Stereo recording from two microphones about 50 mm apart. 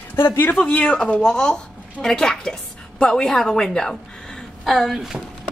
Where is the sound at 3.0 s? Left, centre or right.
Centre.